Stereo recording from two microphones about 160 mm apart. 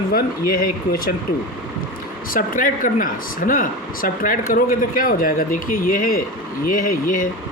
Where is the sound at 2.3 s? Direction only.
60° left (ahead or behind).